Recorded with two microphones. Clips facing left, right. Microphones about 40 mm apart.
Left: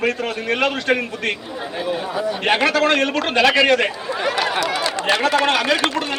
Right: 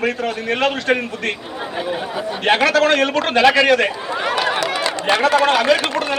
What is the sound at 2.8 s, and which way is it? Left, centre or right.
A man's voice, centre.